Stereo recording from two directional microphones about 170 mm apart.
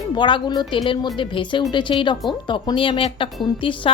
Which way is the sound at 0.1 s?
30° left (ahead or behind).